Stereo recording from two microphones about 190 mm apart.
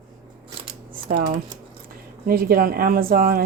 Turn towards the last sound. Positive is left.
turn(degrees=-50)  # may be behind; listen again after turning